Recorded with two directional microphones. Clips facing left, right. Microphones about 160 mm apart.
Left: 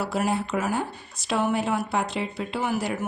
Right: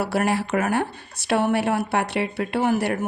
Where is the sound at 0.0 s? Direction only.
70° right (ahead or behind).